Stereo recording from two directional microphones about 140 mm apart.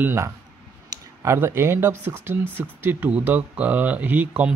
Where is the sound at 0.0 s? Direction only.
20° right (ahead or behind).